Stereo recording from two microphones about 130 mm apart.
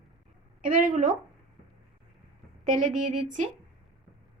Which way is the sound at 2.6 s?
75° right (ahead or behind).